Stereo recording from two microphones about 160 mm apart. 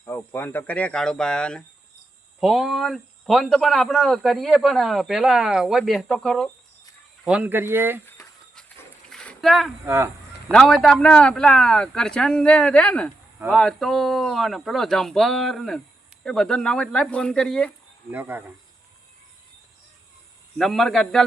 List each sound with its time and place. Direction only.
0.0 s speech: 10° left (ahead or behind)
7.3 s speech: 10° right (ahead or behind)
9.0 s a sound: 5° left (ahead or behind)
9.8 s speech: 15° right (ahead or behind)
10.5 s speech: 5° left (ahead or behind)
18.1 s speech: 10° right (ahead or behind)
20.6 s speech: centre (ahead or behind)